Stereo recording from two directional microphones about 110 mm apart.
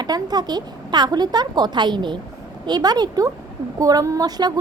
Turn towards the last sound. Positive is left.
turn(degrees=-40)  # may be behind; listen again after turning